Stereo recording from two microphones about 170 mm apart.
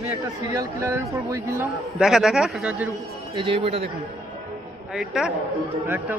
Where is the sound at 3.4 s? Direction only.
30° right (ahead or behind).